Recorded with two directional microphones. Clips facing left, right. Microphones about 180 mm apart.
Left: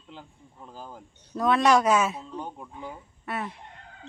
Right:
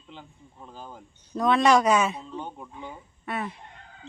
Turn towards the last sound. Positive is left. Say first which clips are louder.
# right 1 dB
turn(degrees=5)  # may be behind; listen again after turning